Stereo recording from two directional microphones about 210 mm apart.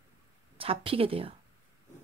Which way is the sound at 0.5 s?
25° right (ahead or behind).